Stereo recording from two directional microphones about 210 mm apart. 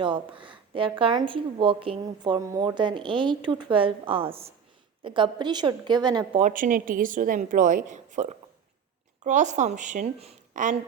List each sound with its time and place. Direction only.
0.0 s a woman's voice: 25° right (ahead or behind)
6.4 s a woman's voice: 40° right (ahead or behind)